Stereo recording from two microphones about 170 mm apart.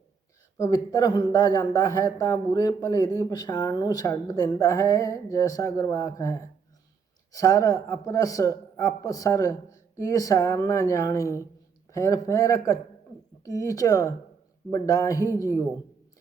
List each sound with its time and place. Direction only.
0.5 s a man's voice: 20° left (ahead or behind)
7.3 s a man's voice: 20° left (ahead or behind)